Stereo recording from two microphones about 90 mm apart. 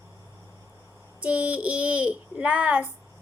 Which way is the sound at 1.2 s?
15° right (ahead or behind).